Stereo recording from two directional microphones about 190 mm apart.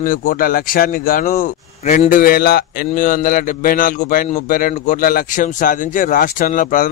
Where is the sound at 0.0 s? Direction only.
45° left (ahead or behind).